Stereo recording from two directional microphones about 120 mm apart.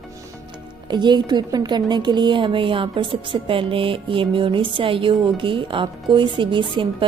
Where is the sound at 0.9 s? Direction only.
40° right (ahead or behind).